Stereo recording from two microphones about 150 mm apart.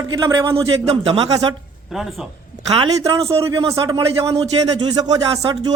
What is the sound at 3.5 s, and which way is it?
A man's voice, 25° right (ahead or behind).